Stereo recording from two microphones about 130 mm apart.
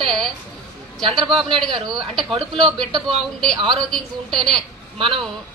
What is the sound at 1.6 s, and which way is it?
Speech, 35° right (ahead or behind).